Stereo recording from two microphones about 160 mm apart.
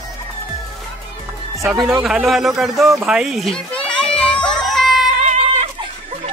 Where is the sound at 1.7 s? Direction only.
5° right (ahead or behind).